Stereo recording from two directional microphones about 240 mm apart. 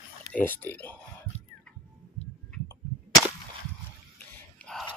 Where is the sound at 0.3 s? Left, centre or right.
Centre.